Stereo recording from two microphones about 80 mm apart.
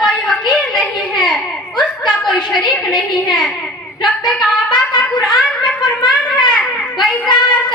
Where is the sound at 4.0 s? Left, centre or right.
Left.